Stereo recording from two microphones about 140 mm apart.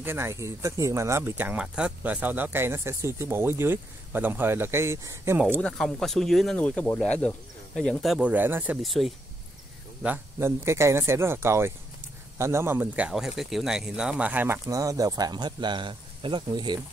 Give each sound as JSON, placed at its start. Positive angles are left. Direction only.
{"t": 0.0, "sound": "speech", "side_deg": -15}
{"t": 5.6, "sound": "speech", "side_deg": 5}
{"t": 8.8, "sound": "speech", "side_deg": 0}
{"t": 10.0, "sound": "speech", "side_deg": -15}